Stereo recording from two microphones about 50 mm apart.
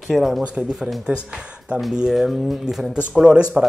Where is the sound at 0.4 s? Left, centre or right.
Centre.